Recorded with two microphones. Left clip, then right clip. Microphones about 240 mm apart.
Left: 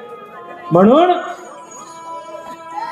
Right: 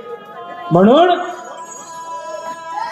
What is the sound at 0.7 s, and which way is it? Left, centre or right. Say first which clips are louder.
Speech: even; right.